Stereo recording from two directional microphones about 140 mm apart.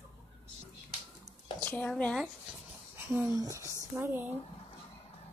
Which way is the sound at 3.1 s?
25° right (ahead or behind).